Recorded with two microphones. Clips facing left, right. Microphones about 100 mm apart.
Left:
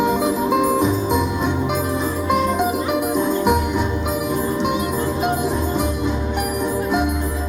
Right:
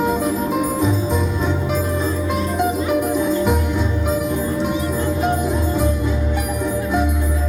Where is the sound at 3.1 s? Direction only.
20° left (ahead or behind).